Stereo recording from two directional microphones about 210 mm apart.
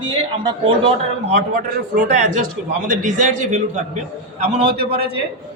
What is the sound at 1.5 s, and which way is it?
A man's voice, 35° right (ahead or behind).